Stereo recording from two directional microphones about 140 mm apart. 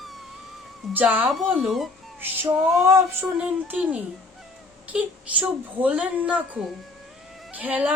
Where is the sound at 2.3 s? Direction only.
15° right (ahead or behind).